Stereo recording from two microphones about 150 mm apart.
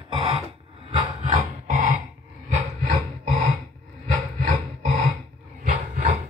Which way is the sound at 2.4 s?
55° right (ahead or behind).